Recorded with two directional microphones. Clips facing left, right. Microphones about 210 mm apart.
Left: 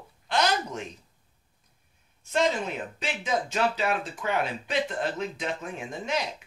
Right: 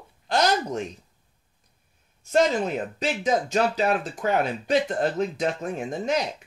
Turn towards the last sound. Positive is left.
turn(degrees=-40)  # may be behind; listen again after turning